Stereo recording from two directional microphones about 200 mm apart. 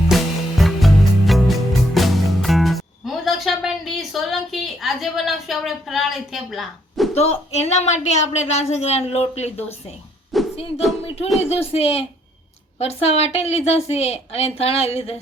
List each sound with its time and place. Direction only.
0.1 s music: centre (ahead or behind)
7.1 s speech: 30° left (ahead or behind)
10.3 s music: centre (ahead or behind)
11.3 s speech: 30° left (ahead or behind)